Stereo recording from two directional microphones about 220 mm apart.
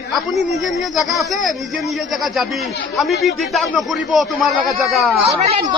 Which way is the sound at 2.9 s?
Centre (ahead or behind).